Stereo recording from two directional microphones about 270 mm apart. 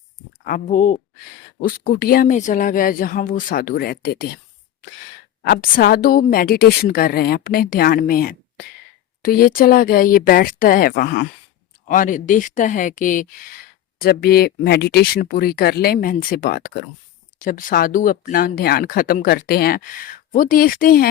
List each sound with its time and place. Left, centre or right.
0.4 s speech: left
5.4 s speech: left